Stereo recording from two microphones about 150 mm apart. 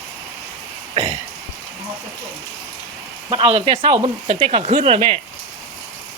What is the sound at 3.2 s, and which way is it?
Speech, 35° right (ahead or behind).